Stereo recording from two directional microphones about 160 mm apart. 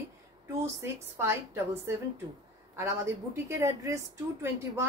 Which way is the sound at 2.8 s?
15° right (ahead or behind).